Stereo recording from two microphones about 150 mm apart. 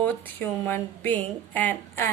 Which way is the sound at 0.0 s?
15° left (ahead or behind).